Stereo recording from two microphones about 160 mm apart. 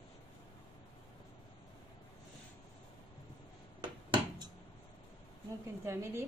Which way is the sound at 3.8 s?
25° right (ahead or behind).